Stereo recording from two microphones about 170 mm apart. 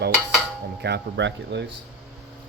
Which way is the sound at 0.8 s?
85° right.